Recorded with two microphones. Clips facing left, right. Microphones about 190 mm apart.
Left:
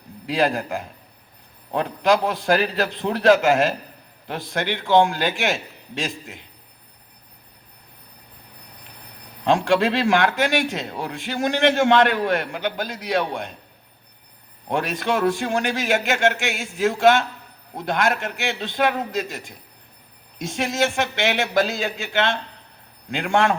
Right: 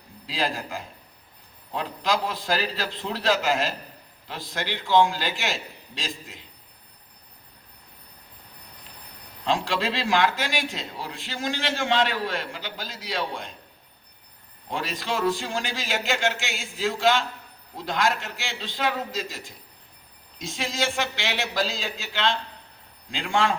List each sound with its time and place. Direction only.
0.3 s a man's voice: 60° left (ahead or behind)
9.4 s a man's voice: 60° left (ahead or behind)
14.7 s a man's voice: 60° left (ahead or behind)
20.6 s a man's voice: 65° left (ahead or behind)
23.0 s a man's voice: 65° left (ahead or behind)